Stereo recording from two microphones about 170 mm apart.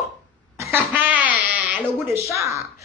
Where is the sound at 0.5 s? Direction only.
15° right (ahead or behind).